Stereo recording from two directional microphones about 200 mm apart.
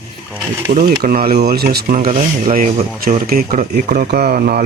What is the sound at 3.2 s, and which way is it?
Speech, 45° right (ahead or behind).